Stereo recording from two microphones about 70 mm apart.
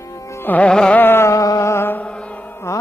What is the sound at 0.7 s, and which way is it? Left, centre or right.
Music, centre.